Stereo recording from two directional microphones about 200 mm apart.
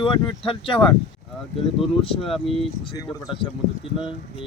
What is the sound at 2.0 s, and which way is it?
Speech, 30° left (ahead or behind).